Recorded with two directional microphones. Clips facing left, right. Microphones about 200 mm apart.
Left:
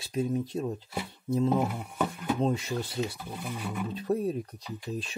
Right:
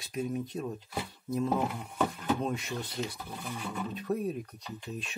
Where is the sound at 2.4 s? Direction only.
30° left (ahead or behind).